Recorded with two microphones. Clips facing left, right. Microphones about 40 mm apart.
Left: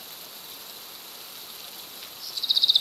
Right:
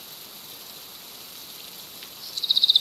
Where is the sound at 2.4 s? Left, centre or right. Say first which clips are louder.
Right 2 dB; right.